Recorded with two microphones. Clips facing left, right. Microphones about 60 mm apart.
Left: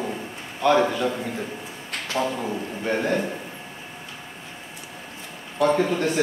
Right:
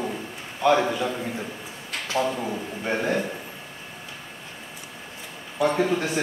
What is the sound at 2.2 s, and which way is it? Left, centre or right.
Speech, centre.